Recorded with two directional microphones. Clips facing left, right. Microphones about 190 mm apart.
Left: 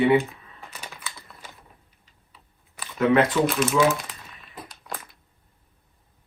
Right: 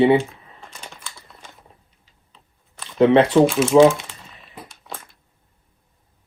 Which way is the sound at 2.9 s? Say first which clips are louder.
Right 5 dB; 30° right (ahead or behind).